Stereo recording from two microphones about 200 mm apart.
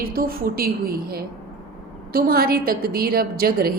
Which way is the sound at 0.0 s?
45° right (ahead or behind).